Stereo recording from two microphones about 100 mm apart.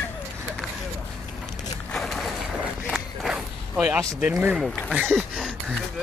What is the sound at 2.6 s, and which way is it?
Walk, 5° right (ahead or behind).